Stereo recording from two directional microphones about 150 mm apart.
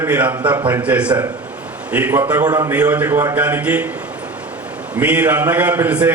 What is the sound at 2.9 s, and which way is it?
Speech, 15° right (ahead or behind).